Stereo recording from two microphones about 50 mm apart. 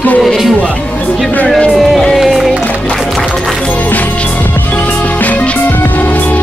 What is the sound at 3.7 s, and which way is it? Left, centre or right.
Music, left.